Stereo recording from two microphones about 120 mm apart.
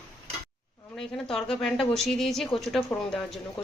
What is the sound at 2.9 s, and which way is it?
Speech, 15° left (ahead or behind).